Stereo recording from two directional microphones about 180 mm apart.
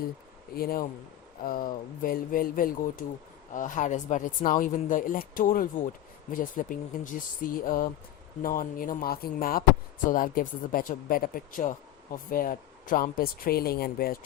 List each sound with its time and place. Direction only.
0.5 s speech: 55° left (ahead or behind)